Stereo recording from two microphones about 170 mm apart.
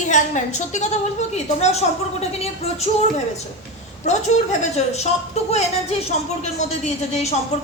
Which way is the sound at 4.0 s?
45° left (ahead or behind).